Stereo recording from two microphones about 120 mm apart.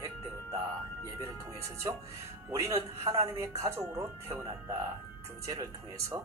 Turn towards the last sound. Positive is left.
turn(degrees=-25)  # may be behind; listen again after turning